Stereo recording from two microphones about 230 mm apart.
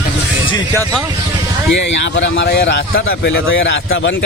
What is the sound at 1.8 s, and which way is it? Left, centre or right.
Speech, left.